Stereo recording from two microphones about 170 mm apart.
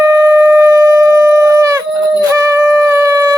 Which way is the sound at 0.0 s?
15° right (ahead or behind).